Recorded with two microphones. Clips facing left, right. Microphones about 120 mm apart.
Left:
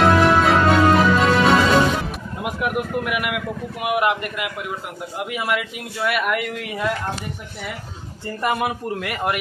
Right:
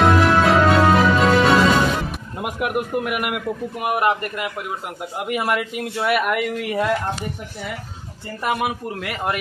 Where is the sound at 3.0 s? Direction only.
45° right (ahead or behind).